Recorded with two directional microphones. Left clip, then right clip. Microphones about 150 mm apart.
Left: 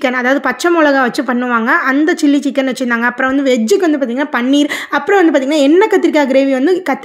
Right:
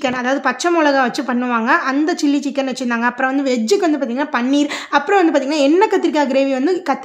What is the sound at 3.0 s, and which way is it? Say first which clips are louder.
A woman's voice: left 2 dB; 20° left (ahead or behind).